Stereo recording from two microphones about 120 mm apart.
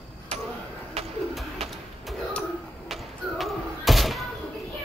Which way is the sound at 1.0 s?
60° right (ahead or behind).